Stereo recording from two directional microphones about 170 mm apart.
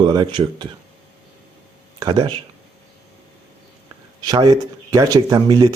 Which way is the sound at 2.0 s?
25° right (ahead or behind).